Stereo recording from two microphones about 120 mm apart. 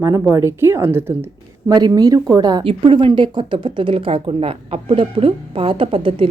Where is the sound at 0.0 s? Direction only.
25° right (ahead or behind).